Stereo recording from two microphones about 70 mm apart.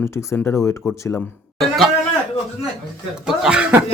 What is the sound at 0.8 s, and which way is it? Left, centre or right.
Speech, centre.